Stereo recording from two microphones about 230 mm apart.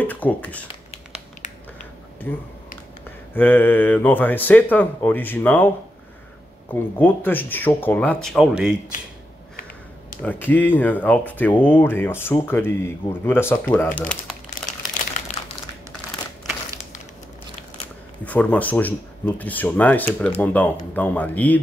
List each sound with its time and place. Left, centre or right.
0.0 s speech: centre
2.3 s speech: centre
6.7 s speech: centre
10.2 s speech: centre
14.6 s crumpling: centre
15.4 s crumpling: left
18.2 s speech: centre